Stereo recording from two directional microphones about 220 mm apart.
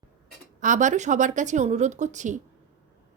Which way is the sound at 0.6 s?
35° right (ahead or behind).